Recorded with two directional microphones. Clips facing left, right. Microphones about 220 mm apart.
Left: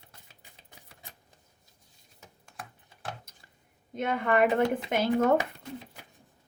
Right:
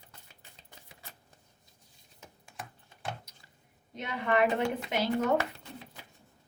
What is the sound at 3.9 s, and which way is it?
Speech, 50° left (ahead or behind).